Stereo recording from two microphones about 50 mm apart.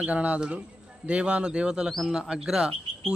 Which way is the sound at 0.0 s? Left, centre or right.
Right.